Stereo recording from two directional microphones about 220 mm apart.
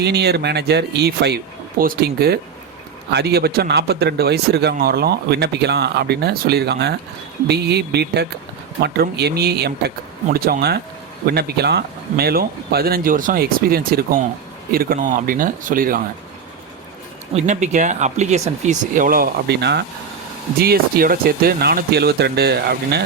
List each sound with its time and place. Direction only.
0.0 s speech: 50° right (ahead or behind)
17.3 s speech: 35° right (ahead or behind)